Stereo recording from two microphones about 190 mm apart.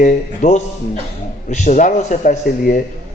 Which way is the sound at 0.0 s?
40° left (ahead or behind).